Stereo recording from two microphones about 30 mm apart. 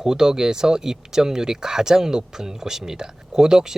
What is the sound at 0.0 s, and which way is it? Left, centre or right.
Speech, centre.